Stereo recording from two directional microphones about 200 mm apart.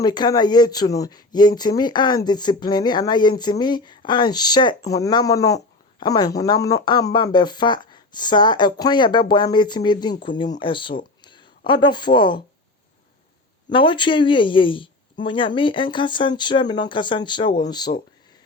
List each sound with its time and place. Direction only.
0.0 s speech: 20° left (ahead or behind)
13.7 s speech: 25° left (ahead or behind)